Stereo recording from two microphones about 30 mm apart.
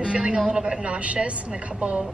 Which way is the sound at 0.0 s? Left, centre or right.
Right.